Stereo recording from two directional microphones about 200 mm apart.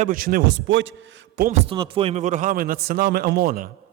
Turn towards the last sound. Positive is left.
turn(degrees=-50)  # may be behind; listen again after turning